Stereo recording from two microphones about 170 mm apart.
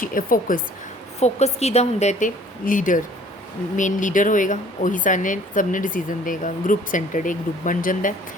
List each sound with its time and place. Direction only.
0.0 s a woman's voice: 55° left (ahead or behind)
1.2 s a woman's voice: 40° left (ahead or behind)